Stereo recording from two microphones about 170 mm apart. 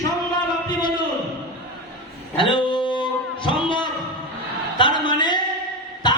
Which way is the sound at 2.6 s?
30° left (ahead or behind).